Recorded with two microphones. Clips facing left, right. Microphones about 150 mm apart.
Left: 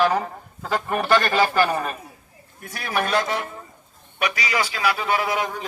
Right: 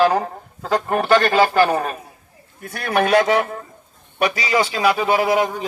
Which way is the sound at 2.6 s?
55° right (ahead or behind).